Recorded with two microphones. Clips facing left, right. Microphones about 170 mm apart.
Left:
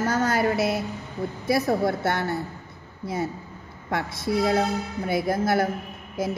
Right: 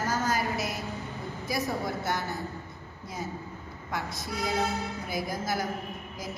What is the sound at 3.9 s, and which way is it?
A woman's voice, 65° left (ahead or behind).